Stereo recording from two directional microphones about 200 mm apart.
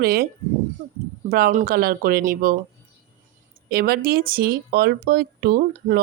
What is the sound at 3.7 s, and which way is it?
Speech, 50° right (ahead or behind).